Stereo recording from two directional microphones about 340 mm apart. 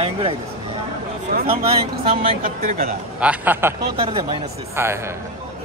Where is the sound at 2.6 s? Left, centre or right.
Right.